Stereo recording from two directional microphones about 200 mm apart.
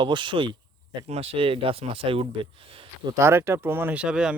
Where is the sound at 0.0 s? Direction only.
25° right (ahead or behind).